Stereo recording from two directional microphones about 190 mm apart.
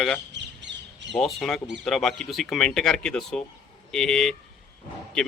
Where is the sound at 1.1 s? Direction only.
5° left (ahead or behind).